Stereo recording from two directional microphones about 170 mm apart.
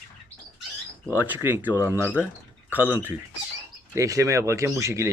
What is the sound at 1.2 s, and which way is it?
Speech, 10° right (ahead or behind).